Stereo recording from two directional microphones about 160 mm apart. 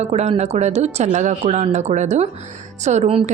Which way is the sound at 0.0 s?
40° right (ahead or behind).